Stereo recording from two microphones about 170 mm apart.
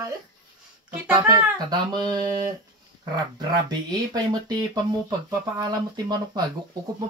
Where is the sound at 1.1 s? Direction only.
25° right (ahead or behind).